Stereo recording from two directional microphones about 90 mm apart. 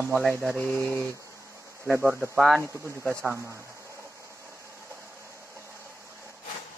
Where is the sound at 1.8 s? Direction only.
25° right (ahead or behind).